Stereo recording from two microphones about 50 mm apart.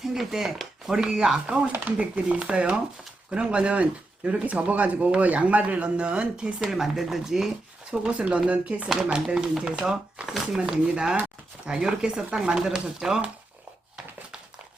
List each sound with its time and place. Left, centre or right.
0.0 s speech: centre
6.7 s speech: centre
7.9 s speech: centre
9.0 s speech: centre